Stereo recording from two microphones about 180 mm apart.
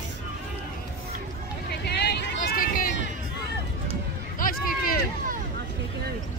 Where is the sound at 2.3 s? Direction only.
50° left (ahead or behind).